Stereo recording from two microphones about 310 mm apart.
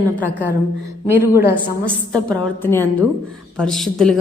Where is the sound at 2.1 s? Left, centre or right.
Centre.